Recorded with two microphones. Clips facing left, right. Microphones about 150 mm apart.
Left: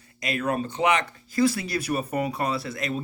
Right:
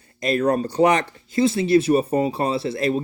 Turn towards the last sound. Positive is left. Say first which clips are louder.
# right 7 dB
turn(degrees=-30)  # may be behind; listen again after turning